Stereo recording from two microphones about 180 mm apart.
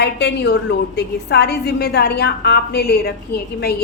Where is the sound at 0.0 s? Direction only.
70° left (ahead or behind).